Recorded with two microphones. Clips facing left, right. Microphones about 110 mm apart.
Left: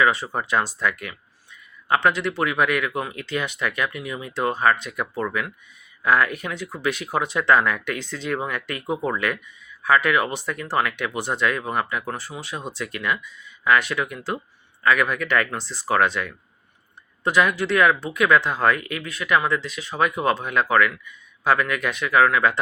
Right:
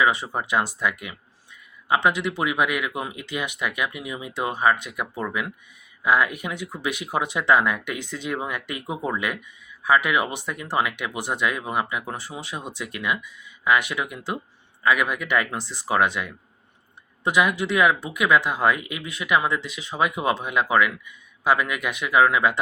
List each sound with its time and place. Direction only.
0.0 s speech: 15° right (ahead or behind)